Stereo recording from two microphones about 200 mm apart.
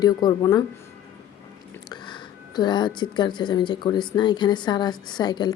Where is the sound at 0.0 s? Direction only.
20° left (ahead or behind).